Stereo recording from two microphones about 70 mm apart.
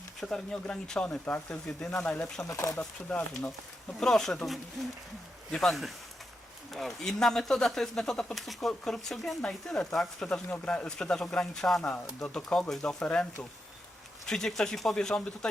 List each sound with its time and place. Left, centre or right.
0.2 s speech: centre
2.4 s speech: left
2.7 s speech: centre
4.0 s speech: centre
6.7 s speech: centre
14.3 s speech: centre